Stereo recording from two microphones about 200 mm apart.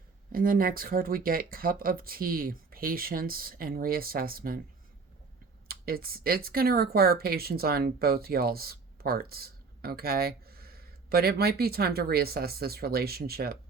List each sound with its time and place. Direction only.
0.3 s speech: 45° right (ahead or behind)
5.6 s speech: 50° right (ahead or behind)